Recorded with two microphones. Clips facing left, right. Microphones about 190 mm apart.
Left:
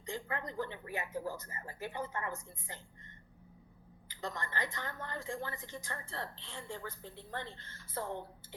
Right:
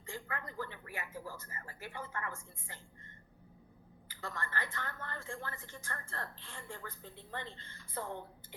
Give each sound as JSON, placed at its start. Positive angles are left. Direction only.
{"t": 0.0, "sound": "a woman's voice", "side_deg": 20}
{"t": 4.1, "sound": "a woman's voice", "side_deg": 20}
{"t": 7.5, "sound": "a woman's voice", "side_deg": -15}
{"t": 7.9, "sound": "a woman's voice", "side_deg": 15}